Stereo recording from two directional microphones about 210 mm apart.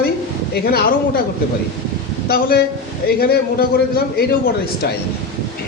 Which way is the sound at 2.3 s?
45° left (ahead or behind).